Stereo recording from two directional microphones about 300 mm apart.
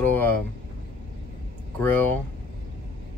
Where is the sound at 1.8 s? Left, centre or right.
Centre.